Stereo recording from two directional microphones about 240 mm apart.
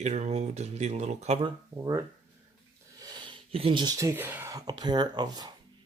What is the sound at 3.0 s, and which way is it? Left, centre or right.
Speech, centre.